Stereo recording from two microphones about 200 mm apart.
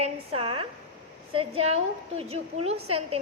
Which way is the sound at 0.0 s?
30° right (ahead or behind).